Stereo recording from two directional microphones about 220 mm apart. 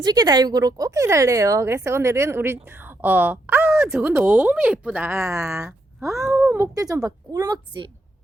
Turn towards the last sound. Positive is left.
turn(degrees=-20)  # may be behind; listen again after turning